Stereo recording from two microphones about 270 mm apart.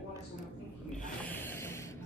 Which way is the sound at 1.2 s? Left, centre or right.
Centre.